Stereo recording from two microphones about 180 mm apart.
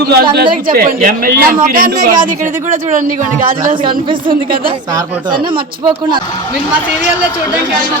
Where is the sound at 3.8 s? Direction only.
25° right (ahead or behind).